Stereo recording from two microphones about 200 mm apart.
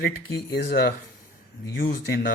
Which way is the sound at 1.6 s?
50° left (ahead or behind).